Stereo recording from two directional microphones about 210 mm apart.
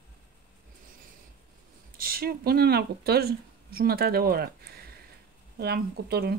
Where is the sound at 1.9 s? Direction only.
45° right (ahead or behind).